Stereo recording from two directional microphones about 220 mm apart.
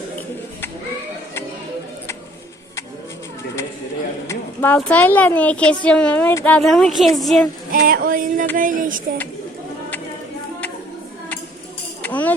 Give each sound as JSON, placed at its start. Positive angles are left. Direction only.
{"t": 4.3, "sound": "speech", "side_deg": 10}
{"t": 7.7, "sound": "a sound", "side_deg": -40}
{"t": 12.0, "sound": "tambourine", "side_deg": 5}